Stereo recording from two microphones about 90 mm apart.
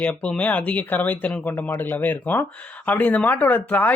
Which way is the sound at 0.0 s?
15° left (ahead or behind).